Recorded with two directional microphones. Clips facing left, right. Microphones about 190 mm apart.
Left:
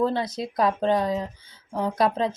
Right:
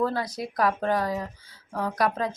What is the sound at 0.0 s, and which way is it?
Speech, 25° left (ahead or behind).